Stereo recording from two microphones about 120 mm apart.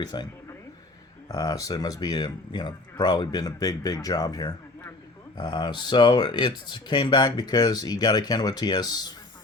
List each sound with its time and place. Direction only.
0.0 s speech: 35° left (ahead or behind)
1.3 s speech: 30° left (ahead or behind)